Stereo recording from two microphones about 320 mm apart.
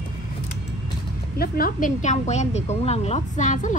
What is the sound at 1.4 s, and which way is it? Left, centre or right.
A woman's voice, left.